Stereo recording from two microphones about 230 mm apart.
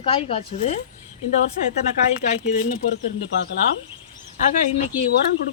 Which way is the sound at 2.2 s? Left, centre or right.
Left.